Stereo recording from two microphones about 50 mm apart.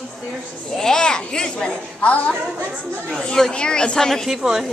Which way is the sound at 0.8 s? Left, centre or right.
Centre.